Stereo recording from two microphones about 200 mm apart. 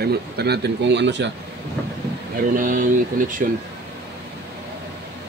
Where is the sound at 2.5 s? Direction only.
40° right (ahead or behind).